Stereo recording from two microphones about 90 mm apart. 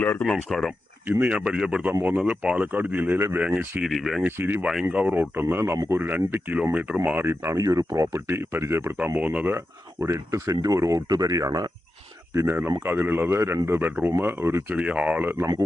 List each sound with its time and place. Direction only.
0.0 s speech: 15° left (ahead or behind)
1.0 s speech: 20° right (ahead or behind)
1.9 s speech: 25° right (ahead or behind)
3.8 s speech: centre (ahead or behind)
4.3 s speech: 25° right (ahead or behind)
4.6 s speech: 5° right (ahead or behind)
4.9 s speech: 20° right (ahead or behind)
7.2 s speech: 30° right (ahead or behind)
9.1 s speech: 15° right (ahead or behind); by 11.7 s 40° right (ahead or behind)
12.3 s speech: 30° right (ahead or behind)
14.8 s speech: 15° right (ahead or behind)